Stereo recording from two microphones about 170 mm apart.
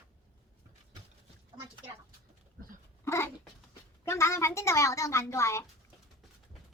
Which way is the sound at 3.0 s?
15° left (ahead or behind).